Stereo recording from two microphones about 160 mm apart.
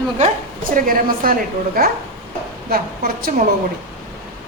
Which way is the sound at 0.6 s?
60° right (ahead or behind).